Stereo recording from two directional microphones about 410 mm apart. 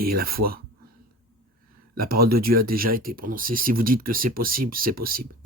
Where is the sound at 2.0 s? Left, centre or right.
Right.